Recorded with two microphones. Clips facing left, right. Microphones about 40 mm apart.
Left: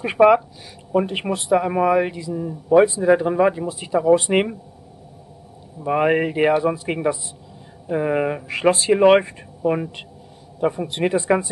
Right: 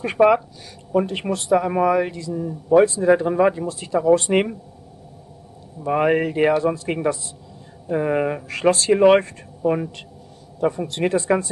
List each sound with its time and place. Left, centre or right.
0.0 s speech: centre
5.9 s speech: centre